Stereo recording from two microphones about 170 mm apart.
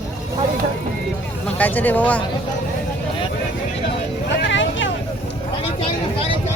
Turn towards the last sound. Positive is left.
turn(degrees=90)